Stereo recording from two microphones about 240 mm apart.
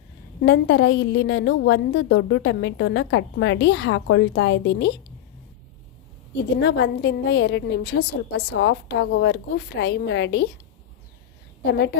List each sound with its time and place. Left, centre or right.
0.4 s a woman's voice: left
6.6 s a woman's voice: left
11.6 s a woman's voice: left